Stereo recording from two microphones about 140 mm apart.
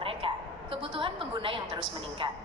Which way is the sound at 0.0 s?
40° right (ahead or behind).